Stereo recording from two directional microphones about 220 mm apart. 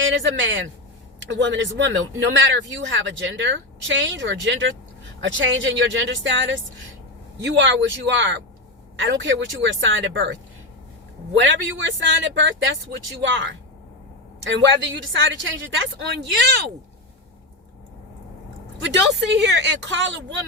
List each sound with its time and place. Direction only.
0.0 s a woman's voice: 60° right (ahead or behind)
11.3 s a woman's voice: 55° right (ahead or behind)
14.5 s a woman's voice: 55° right (ahead or behind)
18.8 s speech: 50° right (ahead or behind)